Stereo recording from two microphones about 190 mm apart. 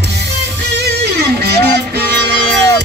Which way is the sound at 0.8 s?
60° right (ahead or behind).